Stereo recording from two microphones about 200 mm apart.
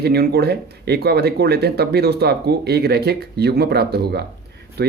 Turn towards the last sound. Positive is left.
turn(degrees=-55)  # may be behind; listen again after turning